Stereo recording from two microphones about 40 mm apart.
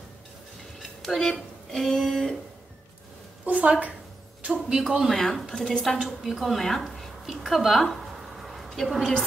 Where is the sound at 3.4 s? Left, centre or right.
Right.